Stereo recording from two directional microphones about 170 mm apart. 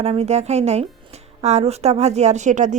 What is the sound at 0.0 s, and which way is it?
A woman's voice, 40° right (ahead or behind).